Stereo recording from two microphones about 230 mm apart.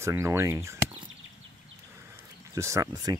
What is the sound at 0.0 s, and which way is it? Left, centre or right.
Speech, centre.